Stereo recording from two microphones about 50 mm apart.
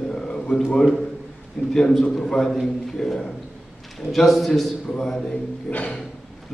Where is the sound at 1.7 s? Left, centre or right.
Centre.